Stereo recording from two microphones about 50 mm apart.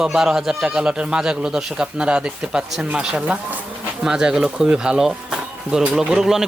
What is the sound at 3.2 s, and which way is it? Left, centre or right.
Speech, right.